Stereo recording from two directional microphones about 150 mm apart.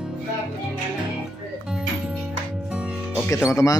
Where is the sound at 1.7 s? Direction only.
5° right (ahead or behind).